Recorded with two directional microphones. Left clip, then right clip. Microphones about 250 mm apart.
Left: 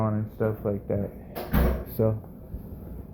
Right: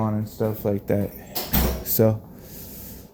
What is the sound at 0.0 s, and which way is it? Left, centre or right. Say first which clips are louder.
Speech: right 2 dB; right.